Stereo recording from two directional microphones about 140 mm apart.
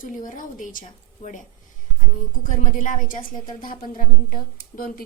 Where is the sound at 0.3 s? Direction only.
70° left (ahead or behind).